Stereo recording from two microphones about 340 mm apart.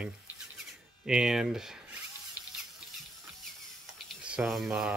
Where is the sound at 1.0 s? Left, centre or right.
Centre.